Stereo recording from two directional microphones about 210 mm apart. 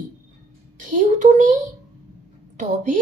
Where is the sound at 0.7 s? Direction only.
40° right (ahead or behind).